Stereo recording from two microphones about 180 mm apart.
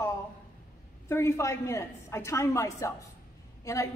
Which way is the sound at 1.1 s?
15° left (ahead or behind).